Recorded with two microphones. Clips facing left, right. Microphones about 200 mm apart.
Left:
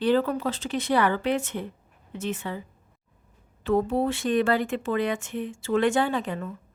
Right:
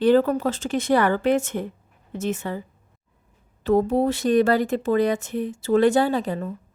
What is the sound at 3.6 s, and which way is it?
Speech, 40° right (ahead or behind).